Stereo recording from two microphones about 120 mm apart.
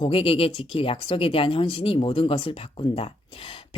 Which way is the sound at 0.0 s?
50° left (ahead or behind).